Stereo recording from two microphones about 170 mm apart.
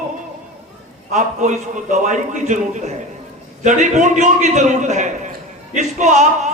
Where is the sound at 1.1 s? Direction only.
45° right (ahead or behind).